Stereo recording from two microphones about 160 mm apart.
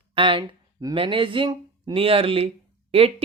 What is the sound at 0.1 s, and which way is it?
Speech, 35° right (ahead or behind).